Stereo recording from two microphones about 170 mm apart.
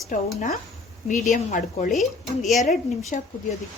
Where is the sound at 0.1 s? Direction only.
50° left (ahead or behind).